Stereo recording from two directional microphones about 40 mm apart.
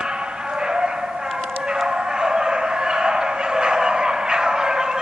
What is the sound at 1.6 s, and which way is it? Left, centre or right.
Bow-wow, centre.